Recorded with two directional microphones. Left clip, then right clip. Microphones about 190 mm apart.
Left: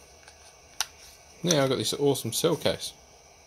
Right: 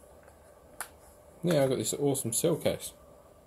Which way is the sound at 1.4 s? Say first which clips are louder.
Left 3 dB; 40° left (ahead or behind).